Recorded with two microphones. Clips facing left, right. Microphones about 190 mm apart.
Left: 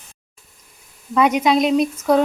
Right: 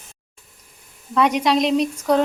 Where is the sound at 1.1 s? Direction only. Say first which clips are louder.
Left 2 dB; 5° left (ahead or behind).